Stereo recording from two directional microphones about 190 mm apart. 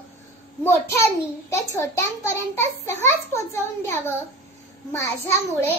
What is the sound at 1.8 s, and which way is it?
A child's voice, 15° left (ahead or behind).